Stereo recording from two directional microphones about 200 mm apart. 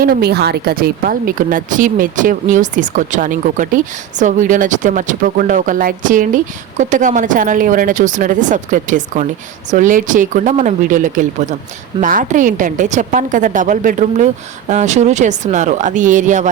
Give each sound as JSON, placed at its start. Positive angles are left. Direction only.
{"t": 0.0, "sound": "speech", "side_deg": -50}